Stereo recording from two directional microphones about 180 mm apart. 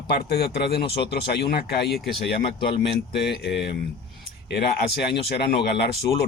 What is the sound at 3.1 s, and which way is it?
Speech, 70° left (ahead or behind).